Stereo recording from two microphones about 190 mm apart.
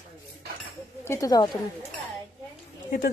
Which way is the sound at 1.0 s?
15° left (ahead or behind).